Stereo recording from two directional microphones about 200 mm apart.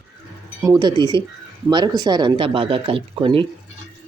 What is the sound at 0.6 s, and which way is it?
Speech, 20° right (ahead or behind).